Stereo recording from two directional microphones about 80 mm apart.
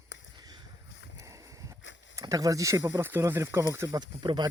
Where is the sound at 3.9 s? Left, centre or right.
Right.